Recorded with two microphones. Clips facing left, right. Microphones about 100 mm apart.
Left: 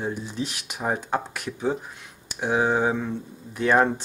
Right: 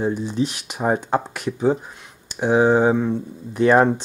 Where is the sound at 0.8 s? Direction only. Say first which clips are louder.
Right 6 dB; 20° right (ahead or behind).